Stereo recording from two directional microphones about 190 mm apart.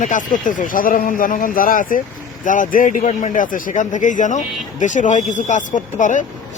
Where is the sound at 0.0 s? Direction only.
45° left (ahead or behind).